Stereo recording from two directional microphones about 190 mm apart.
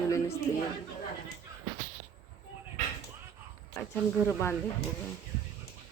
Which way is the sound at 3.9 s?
15° left (ahead or behind).